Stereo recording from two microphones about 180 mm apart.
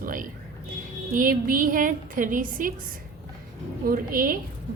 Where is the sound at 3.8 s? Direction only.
55° right (ahead or behind).